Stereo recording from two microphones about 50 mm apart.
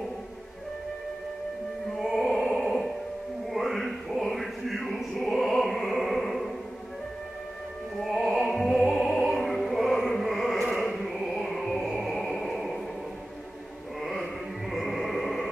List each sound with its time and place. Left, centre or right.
2.0 s music: centre
8.0 s music: centre
14.0 s music: centre